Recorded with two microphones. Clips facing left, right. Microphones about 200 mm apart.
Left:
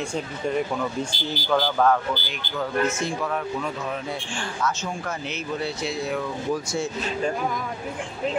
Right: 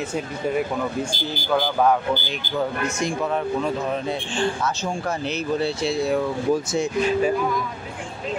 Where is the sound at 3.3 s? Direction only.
30° right (ahead or behind).